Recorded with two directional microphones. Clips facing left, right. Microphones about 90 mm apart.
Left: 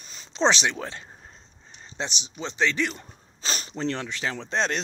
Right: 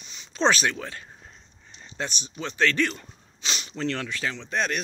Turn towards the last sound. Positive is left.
turn(degrees=30)  # may be behind; listen again after turning